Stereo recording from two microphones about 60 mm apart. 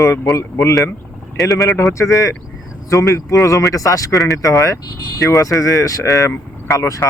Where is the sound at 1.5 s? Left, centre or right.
Left.